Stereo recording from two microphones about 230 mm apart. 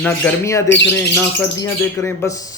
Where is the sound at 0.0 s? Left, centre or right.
Centre.